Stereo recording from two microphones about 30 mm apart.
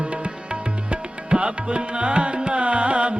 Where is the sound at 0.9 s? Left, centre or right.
Right.